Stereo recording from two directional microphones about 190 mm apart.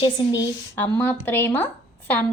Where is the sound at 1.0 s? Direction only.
10° left (ahead or behind).